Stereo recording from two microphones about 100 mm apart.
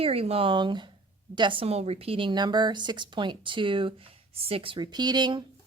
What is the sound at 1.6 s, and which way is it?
Speech, 90° right.